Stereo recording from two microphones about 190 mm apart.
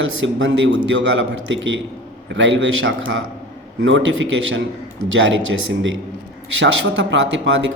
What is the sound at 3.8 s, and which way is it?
A man's voice, 80° right.